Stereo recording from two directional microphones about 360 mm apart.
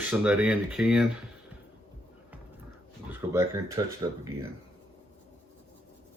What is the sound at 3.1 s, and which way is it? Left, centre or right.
Speech, centre.